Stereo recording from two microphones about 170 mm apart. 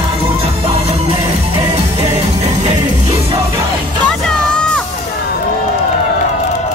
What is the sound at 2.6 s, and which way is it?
Music, 35° right (ahead or behind).